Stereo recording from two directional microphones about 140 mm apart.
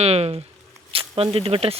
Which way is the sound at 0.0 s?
50° right (ahead or behind).